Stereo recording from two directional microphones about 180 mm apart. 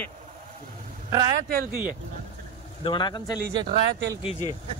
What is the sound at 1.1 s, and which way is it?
Speech, 20° right (ahead or behind).